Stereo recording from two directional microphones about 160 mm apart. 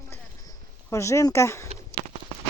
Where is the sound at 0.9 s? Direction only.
20° left (ahead or behind).